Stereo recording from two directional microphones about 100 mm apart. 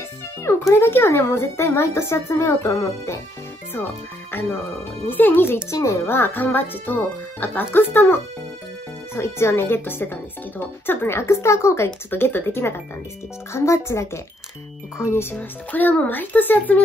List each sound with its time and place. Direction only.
0.4 s a child's voice: 30° left (ahead or behind)
15.3 s speech: 15° left (ahead or behind)